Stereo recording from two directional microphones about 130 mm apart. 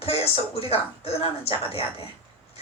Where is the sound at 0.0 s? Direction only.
50° left (ahead or behind).